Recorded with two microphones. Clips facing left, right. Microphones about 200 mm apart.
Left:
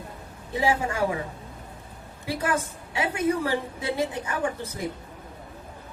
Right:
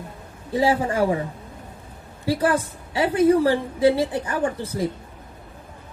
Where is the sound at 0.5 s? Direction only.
35° right (ahead or behind).